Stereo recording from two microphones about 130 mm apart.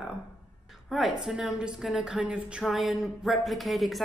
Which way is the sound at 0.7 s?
Centre (ahead or behind).